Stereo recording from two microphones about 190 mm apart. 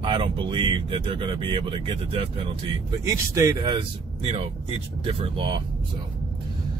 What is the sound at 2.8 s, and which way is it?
Speech, 15° right (ahead or behind).